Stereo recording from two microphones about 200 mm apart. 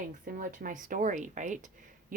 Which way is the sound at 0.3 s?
45° right (ahead or behind).